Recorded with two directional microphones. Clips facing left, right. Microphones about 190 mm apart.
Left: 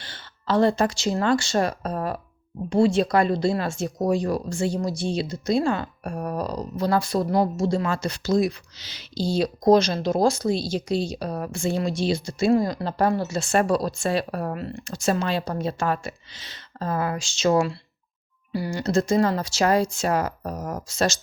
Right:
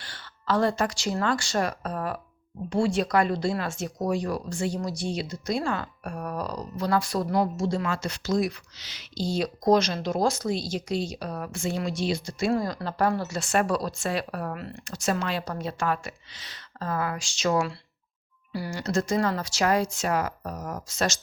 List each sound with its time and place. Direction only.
0.0 s speech: 25° left (ahead or behind)